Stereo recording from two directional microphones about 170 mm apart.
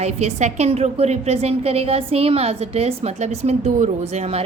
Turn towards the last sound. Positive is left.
turn(degrees=-40)  # may be behind; listen again after turning